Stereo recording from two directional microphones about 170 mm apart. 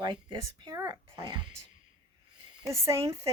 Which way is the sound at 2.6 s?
20° right (ahead or behind).